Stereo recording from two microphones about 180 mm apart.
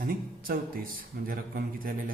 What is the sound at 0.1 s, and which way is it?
A man's voice, 55° right (ahead or behind).